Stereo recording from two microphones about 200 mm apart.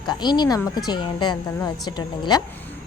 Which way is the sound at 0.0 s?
20° left (ahead or behind).